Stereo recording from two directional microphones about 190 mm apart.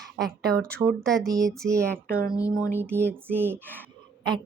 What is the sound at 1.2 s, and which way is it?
Female singing, 20° right (ahead or behind).